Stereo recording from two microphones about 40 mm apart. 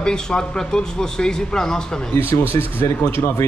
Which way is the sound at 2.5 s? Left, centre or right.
Left.